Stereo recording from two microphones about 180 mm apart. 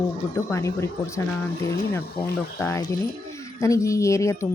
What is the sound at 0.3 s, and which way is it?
Speech, 15° left (ahead or behind).